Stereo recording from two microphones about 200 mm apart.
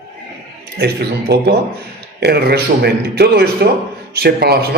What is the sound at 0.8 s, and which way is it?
A man's voice, 55° right (ahead or behind).